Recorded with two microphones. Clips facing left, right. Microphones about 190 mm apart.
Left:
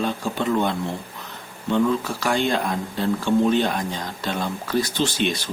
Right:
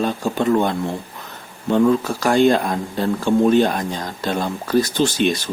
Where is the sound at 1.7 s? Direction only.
45° right (ahead or behind).